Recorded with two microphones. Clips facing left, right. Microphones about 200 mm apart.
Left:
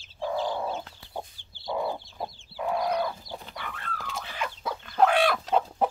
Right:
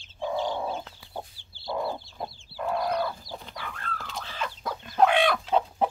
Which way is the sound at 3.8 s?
15° left (ahead or behind).